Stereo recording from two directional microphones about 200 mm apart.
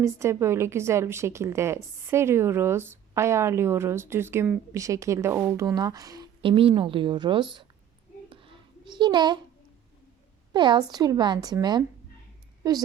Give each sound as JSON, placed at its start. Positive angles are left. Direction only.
{"t": 0.0, "sound": "a woman's voice", "side_deg": -15}
{"t": 8.3, "sound": "a sound", "side_deg": -25}
{"t": 10.5, "sound": "a woman's voice", "side_deg": -20}